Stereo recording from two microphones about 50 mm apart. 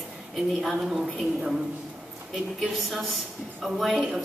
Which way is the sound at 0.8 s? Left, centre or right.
Centre.